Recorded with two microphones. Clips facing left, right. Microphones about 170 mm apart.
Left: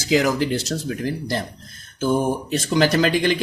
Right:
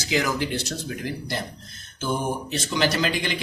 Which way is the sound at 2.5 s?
50° left (ahead or behind).